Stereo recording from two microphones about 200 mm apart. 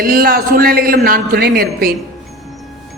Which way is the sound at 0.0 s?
45° right (ahead or behind).